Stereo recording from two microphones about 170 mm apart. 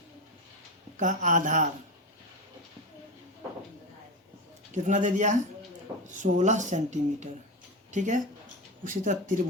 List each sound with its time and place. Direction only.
0.9 s speech: 45° right (ahead or behind)
4.7 s speech: 45° right (ahead or behind)